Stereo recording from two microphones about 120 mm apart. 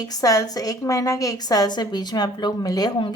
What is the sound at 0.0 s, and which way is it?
A woman's voice, 30° left (ahead or behind).